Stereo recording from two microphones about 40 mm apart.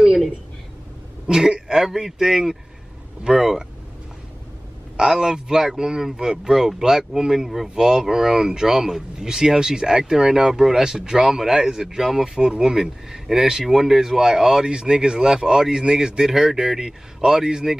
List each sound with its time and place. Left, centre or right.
0.0 s a sound: centre
1.2 s speech: centre
4.9 s speech: centre